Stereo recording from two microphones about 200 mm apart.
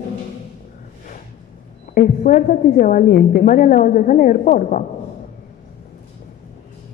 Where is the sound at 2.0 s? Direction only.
40° left (ahead or behind).